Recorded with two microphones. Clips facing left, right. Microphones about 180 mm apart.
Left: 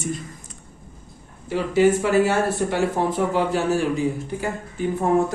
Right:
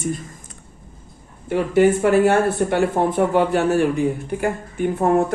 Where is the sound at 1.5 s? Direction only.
55° right (ahead or behind).